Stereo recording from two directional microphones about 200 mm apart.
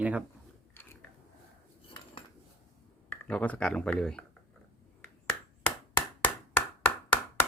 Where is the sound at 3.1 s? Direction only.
5° left (ahead or behind).